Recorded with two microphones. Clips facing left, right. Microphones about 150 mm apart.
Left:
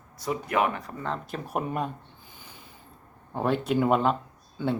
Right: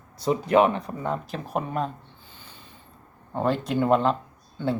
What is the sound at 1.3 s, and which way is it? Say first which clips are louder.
Speech: right 1 dB; 5° left (ahead or behind).